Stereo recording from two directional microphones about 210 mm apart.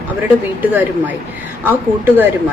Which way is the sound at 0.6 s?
10° right (ahead or behind).